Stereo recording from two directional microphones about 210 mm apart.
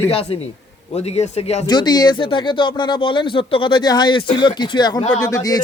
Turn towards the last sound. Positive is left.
turn(degrees=15)  # may be behind; listen again after turning